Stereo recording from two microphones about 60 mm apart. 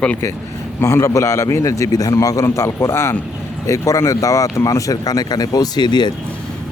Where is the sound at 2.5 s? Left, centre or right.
Left.